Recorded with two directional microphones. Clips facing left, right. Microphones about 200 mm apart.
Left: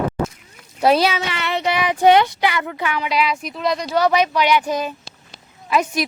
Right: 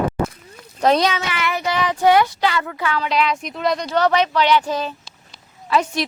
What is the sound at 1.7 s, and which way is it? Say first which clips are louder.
A woman's voice: left 2 dB; 15° left (ahead or behind).